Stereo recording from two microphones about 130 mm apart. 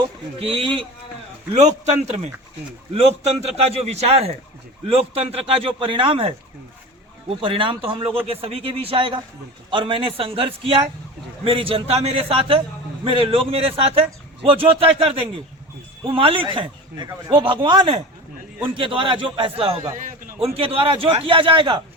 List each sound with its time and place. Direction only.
0.3 s a man's voice: 45° right (ahead or behind)
1.5 s a man's voice: 60° right (ahead or behind); by 21.8 s 40° right (ahead or behind)